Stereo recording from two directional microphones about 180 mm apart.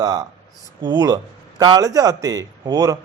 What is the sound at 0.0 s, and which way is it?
A man's voice, 20° right (ahead or behind).